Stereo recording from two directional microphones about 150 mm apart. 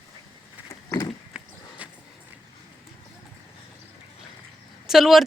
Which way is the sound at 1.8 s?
10° right (ahead or behind).